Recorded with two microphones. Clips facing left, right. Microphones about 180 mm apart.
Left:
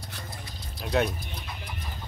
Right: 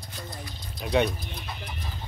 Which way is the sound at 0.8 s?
Centre (ahead or behind).